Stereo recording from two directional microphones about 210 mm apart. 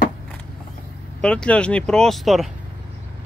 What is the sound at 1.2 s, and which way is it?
Speech, 5° left (ahead or behind).